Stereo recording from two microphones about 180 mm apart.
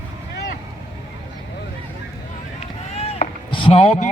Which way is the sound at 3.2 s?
45° left (ahead or behind).